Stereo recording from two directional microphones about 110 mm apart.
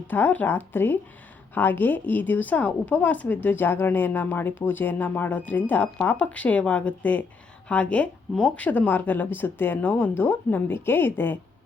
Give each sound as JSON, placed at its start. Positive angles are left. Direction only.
{"t": 0.1, "sound": "a woman's voice", "side_deg": 15}